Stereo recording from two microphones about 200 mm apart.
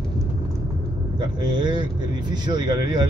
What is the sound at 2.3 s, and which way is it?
Speech, 20° right (ahead or behind).